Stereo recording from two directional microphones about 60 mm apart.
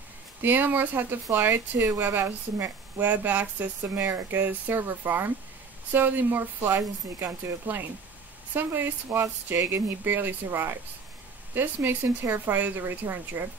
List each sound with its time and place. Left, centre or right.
0.4 s a woman's voice: right
4.0 s a woman's voice: right